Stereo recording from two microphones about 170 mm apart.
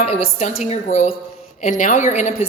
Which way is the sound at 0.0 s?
35° left (ahead or behind).